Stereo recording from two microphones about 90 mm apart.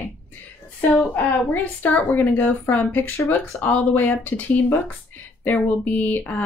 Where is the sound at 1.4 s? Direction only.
20° left (ahead or behind).